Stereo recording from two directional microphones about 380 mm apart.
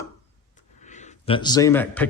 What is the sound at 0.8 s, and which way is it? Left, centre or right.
A man's voice, centre.